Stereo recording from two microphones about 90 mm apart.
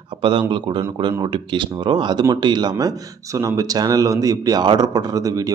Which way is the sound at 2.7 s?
40° right (ahead or behind).